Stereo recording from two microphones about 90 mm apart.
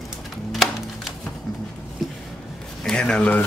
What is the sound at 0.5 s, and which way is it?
Typewriter, centre (ahead or behind).